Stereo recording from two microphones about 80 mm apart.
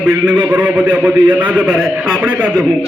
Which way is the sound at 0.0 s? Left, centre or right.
Centre.